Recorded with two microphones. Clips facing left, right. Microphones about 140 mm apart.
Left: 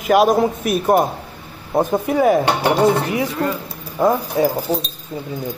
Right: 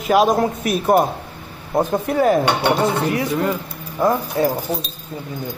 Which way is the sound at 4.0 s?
15° left (ahead or behind).